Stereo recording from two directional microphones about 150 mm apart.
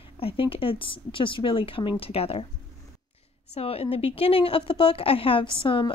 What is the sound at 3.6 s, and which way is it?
Speech, 40° left (ahead or behind).